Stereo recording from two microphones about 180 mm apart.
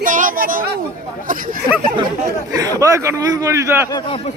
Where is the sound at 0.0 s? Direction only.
50° right (ahead or behind).